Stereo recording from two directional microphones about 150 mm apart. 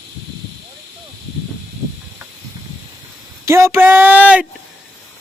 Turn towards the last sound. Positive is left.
turn(degrees=-10)  # may be behind; listen again after turning